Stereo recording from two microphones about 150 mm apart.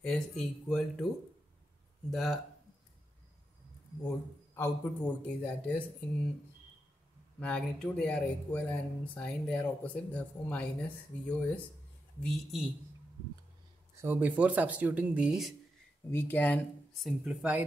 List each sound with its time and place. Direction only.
0.0 s speech: 5° left (ahead or behind)
2.0 s speech: centre (ahead or behind)
4.6 s speech: 15° left (ahead or behind)
7.3 s speech: 10° left (ahead or behind)
14.0 s speech: 15° right (ahead or behind)
16.1 s speech: 15° left (ahead or behind)
17.0 s speech: 5° right (ahead or behind)